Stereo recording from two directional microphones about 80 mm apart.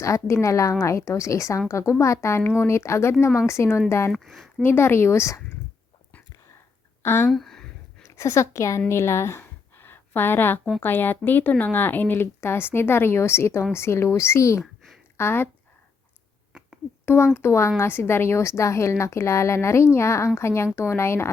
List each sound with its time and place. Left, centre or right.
0.0 s a woman's voice: left
4.1 s speech: centre
4.6 s a woman's voice: left
7.0 s speech: left
7.3 s a sound: centre
8.0 s a woman's voice: left
8.9 s a sound: left
10.8 s a woman's voice: left
17.3 s a woman's voice: left